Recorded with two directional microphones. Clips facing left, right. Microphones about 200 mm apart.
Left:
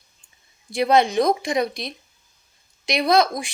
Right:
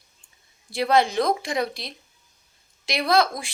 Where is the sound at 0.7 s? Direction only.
20° left (ahead or behind).